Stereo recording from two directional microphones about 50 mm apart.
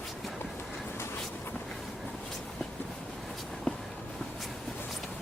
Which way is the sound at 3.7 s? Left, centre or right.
Centre.